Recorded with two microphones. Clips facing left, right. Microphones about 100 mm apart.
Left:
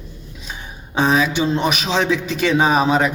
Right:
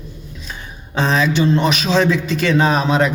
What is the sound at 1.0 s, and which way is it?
A man's voice, 15° left (ahead or behind).